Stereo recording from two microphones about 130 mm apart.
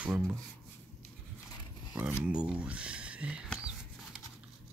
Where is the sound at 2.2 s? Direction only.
10° right (ahead or behind).